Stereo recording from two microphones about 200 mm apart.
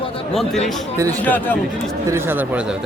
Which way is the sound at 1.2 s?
10° left (ahead or behind).